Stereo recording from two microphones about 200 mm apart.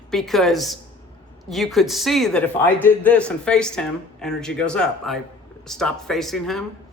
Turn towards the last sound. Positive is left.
turn(degrees=0)  # may be behind; listen again after turning